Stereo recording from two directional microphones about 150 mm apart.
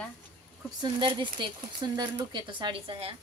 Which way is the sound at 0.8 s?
35° right (ahead or behind).